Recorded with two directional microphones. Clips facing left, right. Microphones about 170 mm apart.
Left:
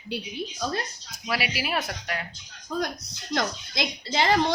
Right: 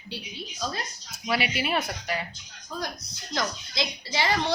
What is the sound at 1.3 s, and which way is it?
Speech, centre (ahead or behind).